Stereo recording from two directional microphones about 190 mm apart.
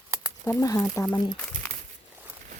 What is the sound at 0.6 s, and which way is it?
Speech, 15° left (ahead or behind).